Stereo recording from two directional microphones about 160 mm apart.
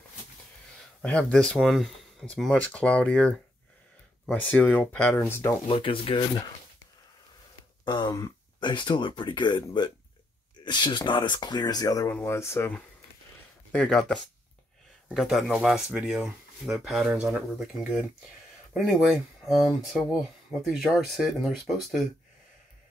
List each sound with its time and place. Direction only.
1.0 s speech: 5° left (ahead or behind)
5.7 s speech: 35° left (ahead or behind)
7.8 s speech: 30° left (ahead or behind)
13.7 s speech: 5° left (ahead or behind)